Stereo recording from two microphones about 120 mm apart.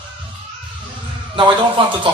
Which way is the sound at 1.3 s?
45° right (ahead or behind).